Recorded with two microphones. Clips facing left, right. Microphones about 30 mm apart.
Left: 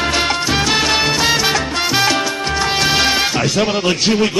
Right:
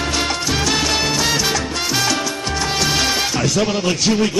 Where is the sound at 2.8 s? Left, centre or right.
Left.